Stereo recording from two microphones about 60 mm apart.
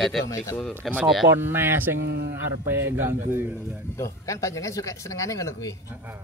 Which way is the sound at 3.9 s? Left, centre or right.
Left.